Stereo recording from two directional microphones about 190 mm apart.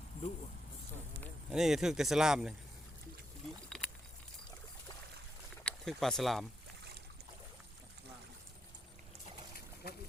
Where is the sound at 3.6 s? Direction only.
5° left (ahead or behind).